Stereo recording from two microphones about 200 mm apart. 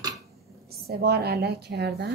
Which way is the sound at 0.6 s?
50° right (ahead or behind).